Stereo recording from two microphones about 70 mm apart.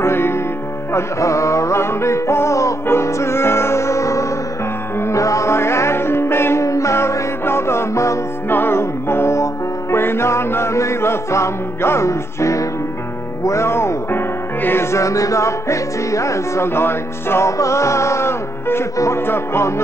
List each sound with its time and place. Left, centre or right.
0.0 s music: left
0.9 s music: left
8.5 s music: left